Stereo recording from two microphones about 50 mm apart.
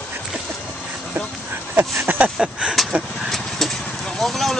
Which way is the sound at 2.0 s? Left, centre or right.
Right.